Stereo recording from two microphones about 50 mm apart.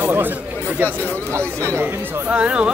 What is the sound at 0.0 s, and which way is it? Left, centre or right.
Chatter, right.